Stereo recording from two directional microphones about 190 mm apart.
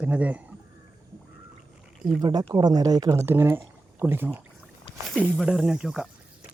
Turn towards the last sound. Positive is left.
turn(degrees=-5)  # may be behind; listen again after turning